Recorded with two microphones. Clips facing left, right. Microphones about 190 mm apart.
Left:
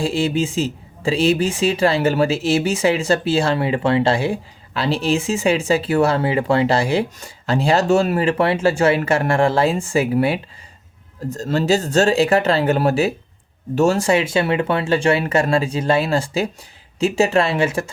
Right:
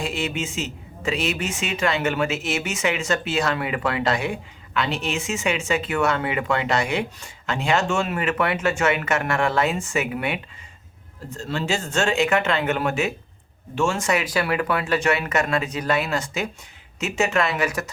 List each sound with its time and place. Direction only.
0.0 s speech: 30° left (ahead or behind)